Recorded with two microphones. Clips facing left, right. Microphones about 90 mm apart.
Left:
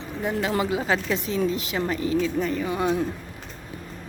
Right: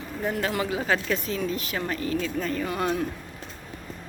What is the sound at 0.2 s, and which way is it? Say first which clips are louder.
Speech: left 2 dB; 15° left (ahead or behind).